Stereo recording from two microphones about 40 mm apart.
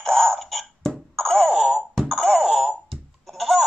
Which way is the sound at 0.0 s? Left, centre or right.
Centre.